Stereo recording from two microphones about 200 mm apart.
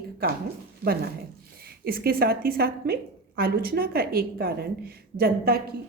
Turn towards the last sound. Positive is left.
turn(degrees=-50)  # may be behind; listen again after turning